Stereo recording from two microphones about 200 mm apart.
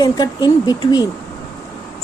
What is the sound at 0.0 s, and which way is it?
A woman's voice, 20° left (ahead or behind).